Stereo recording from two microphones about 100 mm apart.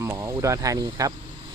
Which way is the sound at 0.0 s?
30° right (ahead or behind).